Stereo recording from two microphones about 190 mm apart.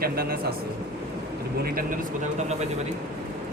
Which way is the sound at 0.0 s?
50° right (ahead or behind).